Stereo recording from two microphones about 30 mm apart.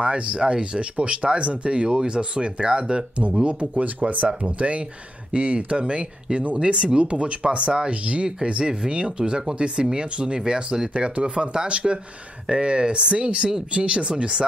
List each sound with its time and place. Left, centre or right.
0.0 s speech: right
1.7 s speech: right
3.4 s speech: right
4.5 s speech: right
8.4 s speech: right
11.1 s speech: right